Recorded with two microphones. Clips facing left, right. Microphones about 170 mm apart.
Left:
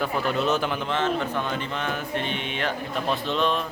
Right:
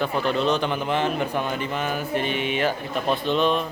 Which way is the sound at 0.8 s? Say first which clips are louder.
Right 2 dB; 10° right (ahead or behind).